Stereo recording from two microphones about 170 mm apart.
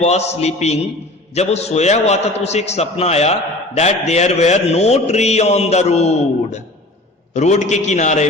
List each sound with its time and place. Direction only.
0.0 s a man's voice: 40° left (ahead or behind)